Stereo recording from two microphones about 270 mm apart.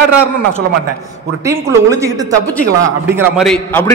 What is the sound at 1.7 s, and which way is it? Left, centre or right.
A man's voice, centre.